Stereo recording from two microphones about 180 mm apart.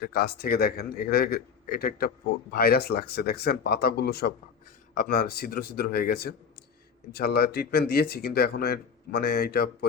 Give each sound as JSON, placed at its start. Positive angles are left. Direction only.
{"t": 0.0, "sound": "a man's voice", "side_deg": 55}